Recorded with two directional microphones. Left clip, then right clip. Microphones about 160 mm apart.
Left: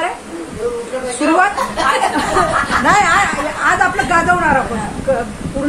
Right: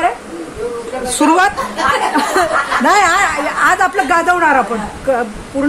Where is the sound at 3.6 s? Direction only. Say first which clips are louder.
Right 1 dB; 90° right.